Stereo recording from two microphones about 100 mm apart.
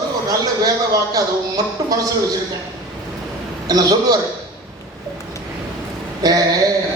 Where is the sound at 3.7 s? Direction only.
40° right (ahead or behind).